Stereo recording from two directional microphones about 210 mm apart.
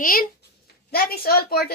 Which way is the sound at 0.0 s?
45° left (ahead or behind).